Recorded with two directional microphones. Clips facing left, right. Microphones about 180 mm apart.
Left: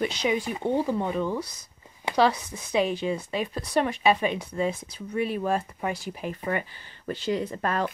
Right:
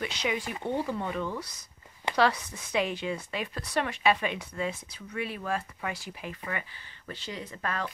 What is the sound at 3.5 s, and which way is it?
Speech, 15° left (ahead or behind).